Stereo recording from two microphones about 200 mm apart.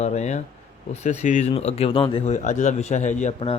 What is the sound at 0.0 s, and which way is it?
Speech, 35° left (ahead or behind).